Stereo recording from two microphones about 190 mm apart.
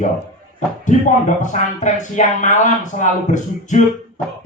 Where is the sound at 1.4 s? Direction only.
40° left (ahead or behind).